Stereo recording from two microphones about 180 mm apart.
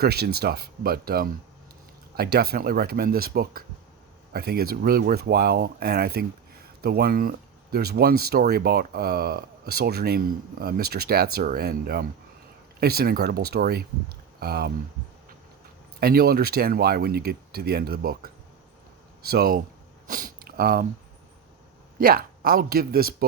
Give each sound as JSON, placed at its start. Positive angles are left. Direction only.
{"t": 0.0, "sound": "speech", "side_deg": -60}
{"t": 16.0, "sound": "speech", "side_deg": -60}
{"t": 19.3, "sound": "speech", "side_deg": -55}
{"t": 20.1, "sound": "sniff", "side_deg": -50}
{"t": 21.9, "sound": "a man's voice", "side_deg": -55}